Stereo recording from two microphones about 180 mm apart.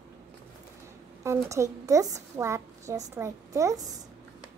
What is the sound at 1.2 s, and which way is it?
A woman's voice, 15° right (ahead or behind).